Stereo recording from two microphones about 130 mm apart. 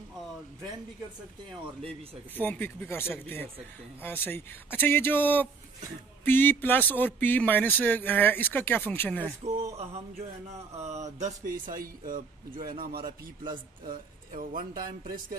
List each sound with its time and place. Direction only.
2.3 s speech: 15° left (ahead or behind)
10.8 s speech: 60° right (ahead or behind); by 15.3 s 90° right